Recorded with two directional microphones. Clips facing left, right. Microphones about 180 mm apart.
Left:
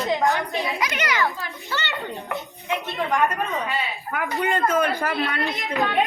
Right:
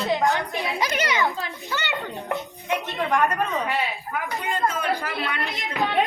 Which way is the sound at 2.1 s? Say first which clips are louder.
Right 2 dB; centre (ahead or behind).